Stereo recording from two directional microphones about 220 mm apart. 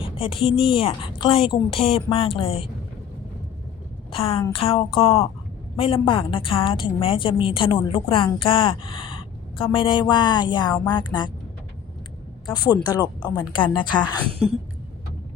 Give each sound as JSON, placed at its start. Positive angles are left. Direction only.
{"t": 0.0, "sound": "a woman's voice", "side_deg": 25}
{"t": 4.1, "sound": "a woman's voice", "side_deg": 25}
{"t": 12.5, "sound": "a woman's voice", "side_deg": 20}